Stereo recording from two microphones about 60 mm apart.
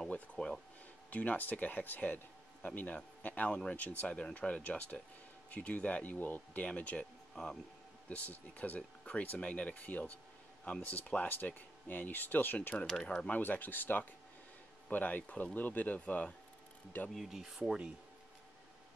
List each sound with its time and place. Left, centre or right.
0.0 s a sound: centre
1.1 s speech: left
3.4 s speech: centre
7.4 s speech: centre
8.1 s speech: left
12.7 s speech: centre
13.3 s speech: left
17.1 s speech: centre